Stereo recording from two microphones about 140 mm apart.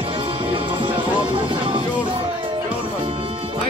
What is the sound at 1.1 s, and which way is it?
Music, 35° right (ahead or behind).